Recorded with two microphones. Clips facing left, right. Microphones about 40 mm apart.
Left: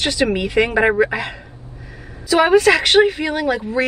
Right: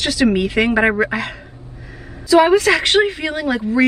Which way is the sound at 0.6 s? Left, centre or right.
Centre.